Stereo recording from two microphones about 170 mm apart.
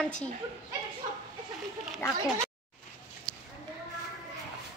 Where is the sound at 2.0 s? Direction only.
15° left (ahead or behind).